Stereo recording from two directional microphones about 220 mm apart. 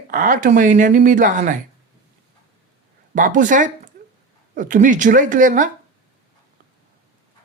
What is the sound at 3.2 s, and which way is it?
Speech, 35° right (ahead or behind).